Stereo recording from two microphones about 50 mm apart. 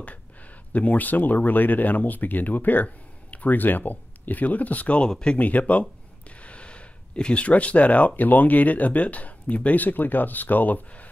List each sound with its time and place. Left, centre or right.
0.7 s speech: left
5.0 s speech: centre
5.4 s speech: left
6.4 s a sound: left
8.2 s speech: left